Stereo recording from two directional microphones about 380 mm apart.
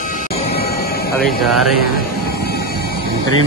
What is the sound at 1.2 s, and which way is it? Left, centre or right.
Speech, centre.